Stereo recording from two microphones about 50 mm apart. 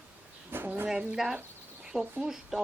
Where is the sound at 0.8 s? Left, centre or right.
Centre.